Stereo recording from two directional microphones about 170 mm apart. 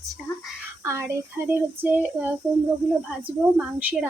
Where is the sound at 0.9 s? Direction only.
15° right (ahead or behind).